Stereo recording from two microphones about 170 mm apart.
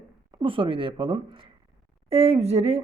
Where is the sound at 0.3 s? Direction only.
25° right (ahead or behind).